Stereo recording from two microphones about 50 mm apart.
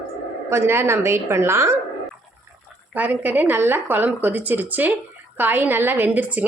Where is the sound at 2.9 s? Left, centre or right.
Right.